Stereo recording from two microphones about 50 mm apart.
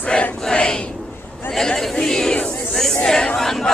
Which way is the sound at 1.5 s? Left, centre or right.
Centre.